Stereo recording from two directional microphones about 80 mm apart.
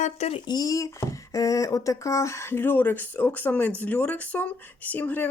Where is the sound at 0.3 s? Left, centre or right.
Left.